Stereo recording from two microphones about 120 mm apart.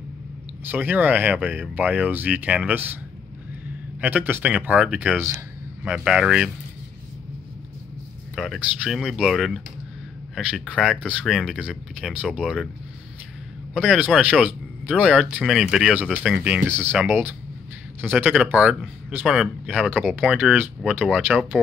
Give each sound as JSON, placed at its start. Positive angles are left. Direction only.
{"t": 0.7, "sound": "speech", "side_deg": -15}
{"t": 4.0, "sound": "a man's voice", "side_deg": -15}
{"t": 8.5, "sound": "a man's voice", "side_deg": -5}
{"t": 13.7, "sound": "speech", "side_deg": -10}
{"t": 16.6, "sound": "a man's voice", "side_deg": -20}
{"t": 19.9, "sound": "speech", "side_deg": -15}